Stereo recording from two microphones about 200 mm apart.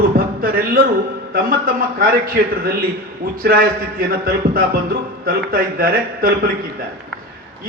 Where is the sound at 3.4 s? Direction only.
45° right (ahead or behind).